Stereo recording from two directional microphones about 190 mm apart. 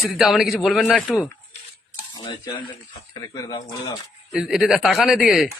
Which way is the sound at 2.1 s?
25° left (ahead or behind).